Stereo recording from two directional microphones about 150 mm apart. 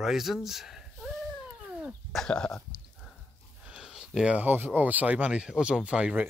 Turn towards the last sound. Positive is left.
turn(degrees=-5)  # may be behind; listen again after turning